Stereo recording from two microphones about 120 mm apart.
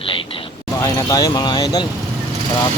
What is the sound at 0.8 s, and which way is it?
Speech, 30° left (ahead or behind).